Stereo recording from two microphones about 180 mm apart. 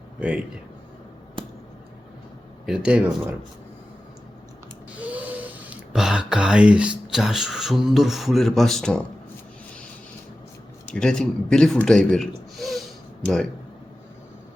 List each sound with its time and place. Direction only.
1.4 s a sound: 25° right (ahead or behind)
2.6 s speech: 5° right (ahead or behind)
4.9 s speech: 10° right (ahead or behind)
10.8 s speech: 5° left (ahead or behind)